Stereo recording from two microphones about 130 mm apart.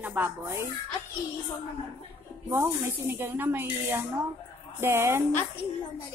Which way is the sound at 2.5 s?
20° right (ahead or behind).